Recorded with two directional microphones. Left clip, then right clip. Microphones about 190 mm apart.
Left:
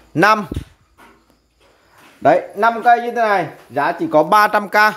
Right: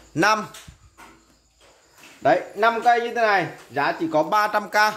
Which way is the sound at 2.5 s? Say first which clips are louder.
Left 5 dB; 40° left (ahead or behind).